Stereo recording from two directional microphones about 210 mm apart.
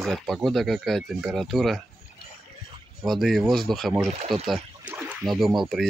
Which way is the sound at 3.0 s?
Centre (ahead or behind).